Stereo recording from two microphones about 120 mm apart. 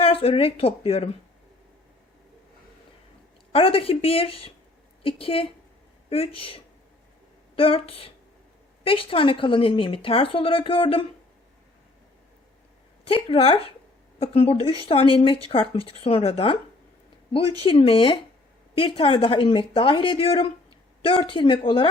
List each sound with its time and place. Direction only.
0.0 s speech: 50° left (ahead or behind)
3.5 s speech: 50° left (ahead or behind)
13.1 s speech: 50° left (ahead or behind)
17.6 s speech: 50° left (ahead or behind)